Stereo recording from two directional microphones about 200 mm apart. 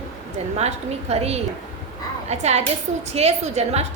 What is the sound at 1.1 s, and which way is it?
A woman's voice, 30° right (ahead or behind).